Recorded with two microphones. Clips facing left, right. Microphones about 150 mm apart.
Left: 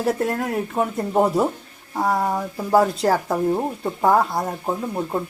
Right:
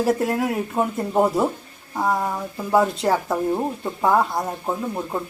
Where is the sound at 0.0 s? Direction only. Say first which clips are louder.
Right 1 dB; 5° right (ahead or behind).